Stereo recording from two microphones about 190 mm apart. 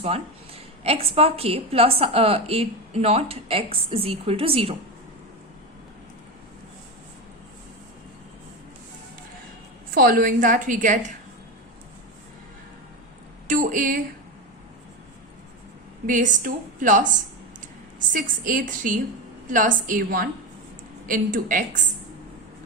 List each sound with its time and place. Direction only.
0.0 s a woman's voice: 30° right (ahead or behind)
9.9 s a woman's voice: 50° right (ahead or behind)
13.5 s a woman's voice: 45° right (ahead or behind)
16.0 s a woman's voice: 45° right (ahead or behind)
18.1 s a woman's voice: 45° right (ahead or behind)